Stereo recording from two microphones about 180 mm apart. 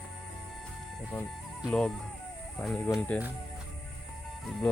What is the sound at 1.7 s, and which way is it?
Speech, 5° left (ahead or behind).